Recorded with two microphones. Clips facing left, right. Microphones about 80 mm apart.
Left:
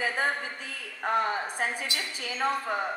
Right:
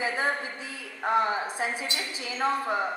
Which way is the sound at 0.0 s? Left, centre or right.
Left.